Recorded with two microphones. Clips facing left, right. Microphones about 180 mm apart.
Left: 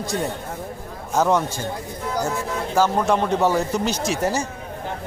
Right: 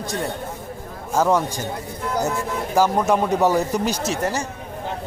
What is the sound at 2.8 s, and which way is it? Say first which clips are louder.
Speech: right 1 dB; 10° right (ahead or behind).